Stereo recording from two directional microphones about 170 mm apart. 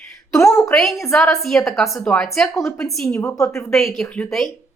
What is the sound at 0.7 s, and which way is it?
A woman's voice, centre (ahead or behind).